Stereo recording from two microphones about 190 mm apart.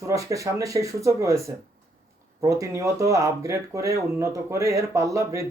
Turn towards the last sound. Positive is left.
turn(degrees=-15)  # may be behind; listen again after turning